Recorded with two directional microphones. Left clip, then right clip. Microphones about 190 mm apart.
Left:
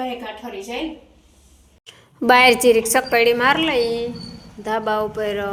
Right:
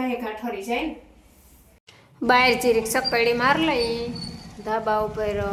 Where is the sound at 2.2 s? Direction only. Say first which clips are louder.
Left 6 dB; 15° left (ahead or behind).